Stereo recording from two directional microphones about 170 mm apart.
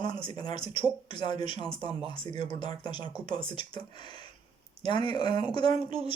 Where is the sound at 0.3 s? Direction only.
25° left (ahead or behind).